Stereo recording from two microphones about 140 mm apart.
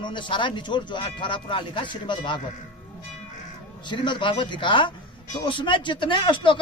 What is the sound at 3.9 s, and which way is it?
Speech, 35° left (ahead or behind).